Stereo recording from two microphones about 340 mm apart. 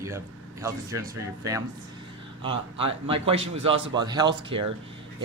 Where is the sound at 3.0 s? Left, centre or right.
Centre.